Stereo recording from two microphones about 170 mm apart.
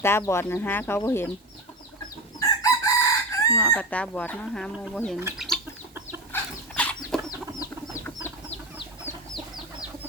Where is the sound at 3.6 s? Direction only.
10° left (ahead or behind).